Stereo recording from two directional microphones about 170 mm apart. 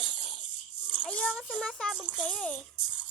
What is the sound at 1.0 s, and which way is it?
A child's voice, 5° left (ahead or behind).